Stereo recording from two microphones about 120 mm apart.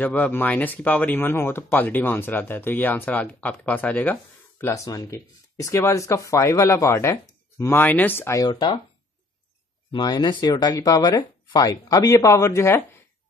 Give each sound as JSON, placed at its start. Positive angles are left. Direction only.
{"t": 0.0, "sound": "speech", "side_deg": 15}
{"t": 8.4, "sound": "speech", "side_deg": 35}
{"t": 9.9, "sound": "speech", "side_deg": 35}